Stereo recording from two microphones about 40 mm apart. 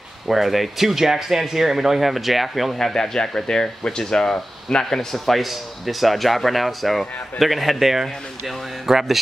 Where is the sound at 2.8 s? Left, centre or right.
Centre.